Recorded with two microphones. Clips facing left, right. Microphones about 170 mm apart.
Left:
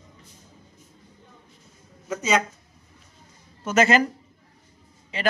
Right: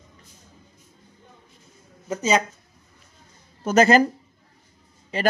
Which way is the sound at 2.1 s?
30° right (ahead or behind).